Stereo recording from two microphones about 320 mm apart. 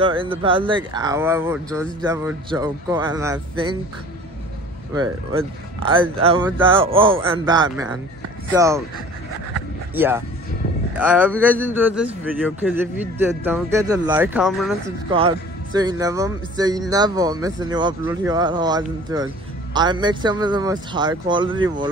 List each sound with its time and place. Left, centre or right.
0.0 s speech: centre
2.0 s speech: centre
4.9 s speech: centre
9.9 s a man's voice: centre
15.0 s speech: centre